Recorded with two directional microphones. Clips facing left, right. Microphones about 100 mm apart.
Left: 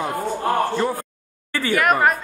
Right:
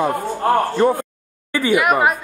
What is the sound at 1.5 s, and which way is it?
Speech, 15° right (ahead or behind).